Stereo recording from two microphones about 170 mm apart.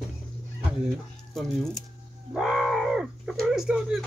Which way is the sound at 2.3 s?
Centre (ahead or behind).